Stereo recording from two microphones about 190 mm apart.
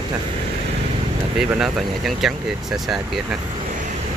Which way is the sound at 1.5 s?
5° right (ahead or behind).